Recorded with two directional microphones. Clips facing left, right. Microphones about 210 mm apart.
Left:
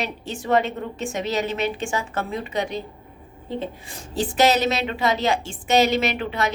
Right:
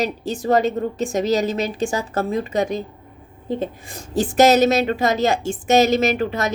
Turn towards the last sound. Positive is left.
turn(degrees=-45)  # may be behind; listen again after turning